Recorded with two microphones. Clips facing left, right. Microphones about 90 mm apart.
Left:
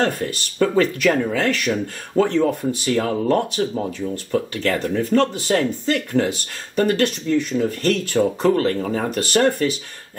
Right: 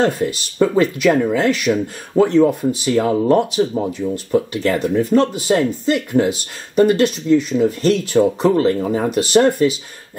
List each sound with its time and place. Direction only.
0.0 s speech: 15° right (ahead or behind)